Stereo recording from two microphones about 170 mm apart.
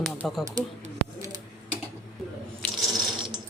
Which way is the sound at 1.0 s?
60° right (ahead or behind).